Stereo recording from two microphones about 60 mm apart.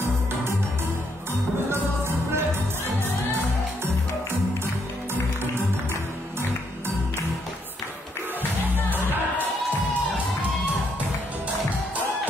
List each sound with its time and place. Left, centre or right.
1.7 s music: right